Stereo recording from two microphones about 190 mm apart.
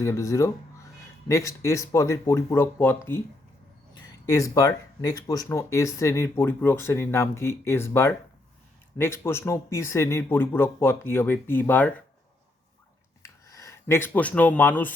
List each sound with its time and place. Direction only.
0.0 s speech: 15° left (ahead or behind)
13.2 s speech: 15° left (ahead or behind)